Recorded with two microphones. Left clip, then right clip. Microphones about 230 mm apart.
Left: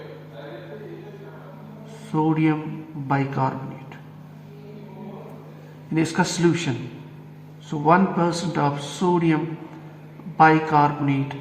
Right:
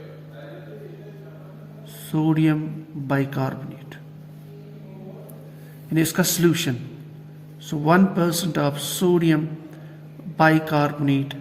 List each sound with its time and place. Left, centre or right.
2.1 s a man's voice: right
5.9 s a man's voice: right
7.7 s a man's voice: right